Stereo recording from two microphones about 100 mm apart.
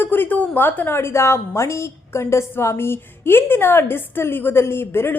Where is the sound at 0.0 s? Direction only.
20° left (ahead or behind).